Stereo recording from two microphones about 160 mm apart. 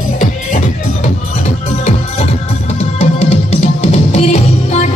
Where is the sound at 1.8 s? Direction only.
40° left (ahead or behind).